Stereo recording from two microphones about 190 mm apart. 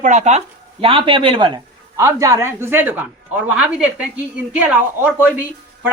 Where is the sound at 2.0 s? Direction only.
15° right (ahead or behind).